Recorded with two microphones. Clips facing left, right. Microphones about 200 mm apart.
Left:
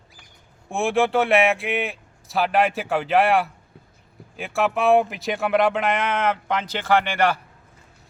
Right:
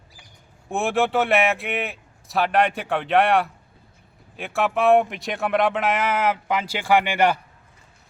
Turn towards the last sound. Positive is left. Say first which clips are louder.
# right 1 dB
turn(degrees=-10)  # may be behind; listen again after turning